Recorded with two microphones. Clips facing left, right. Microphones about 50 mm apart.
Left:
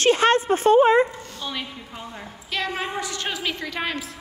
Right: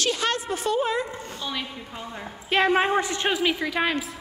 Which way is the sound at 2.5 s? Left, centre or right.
Right.